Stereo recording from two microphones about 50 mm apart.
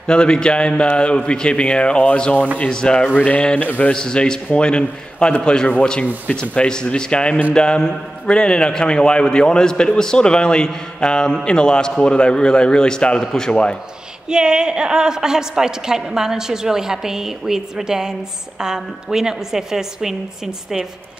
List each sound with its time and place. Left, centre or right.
0.0 s a man's voice: centre
3.2 s a man's voice: left
3.9 s a man's voice: centre
14.3 s a woman's voice: centre